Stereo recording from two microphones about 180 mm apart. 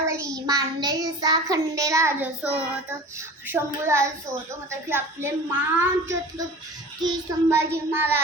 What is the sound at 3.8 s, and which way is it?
Child singing, 15° right (ahead or behind).